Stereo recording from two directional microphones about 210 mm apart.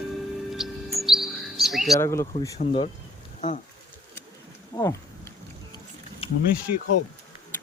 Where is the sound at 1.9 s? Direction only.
15° left (ahead or behind).